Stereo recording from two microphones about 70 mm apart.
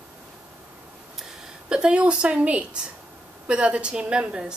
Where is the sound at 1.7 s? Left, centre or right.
Centre.